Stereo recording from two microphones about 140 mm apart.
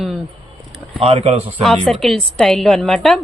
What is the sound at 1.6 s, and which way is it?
A woman's voice, 5° left (ahead or behind).